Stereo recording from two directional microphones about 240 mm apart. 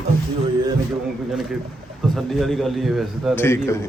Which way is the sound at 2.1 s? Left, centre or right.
Centre.